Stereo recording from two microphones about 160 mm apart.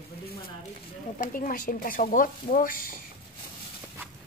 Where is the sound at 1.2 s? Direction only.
60° left (ahead or behind).